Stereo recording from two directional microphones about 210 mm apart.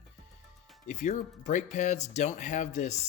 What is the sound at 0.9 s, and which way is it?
Speech, 35° left (ahead or behind).